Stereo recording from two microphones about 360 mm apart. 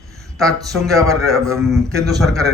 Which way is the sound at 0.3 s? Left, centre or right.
Centre.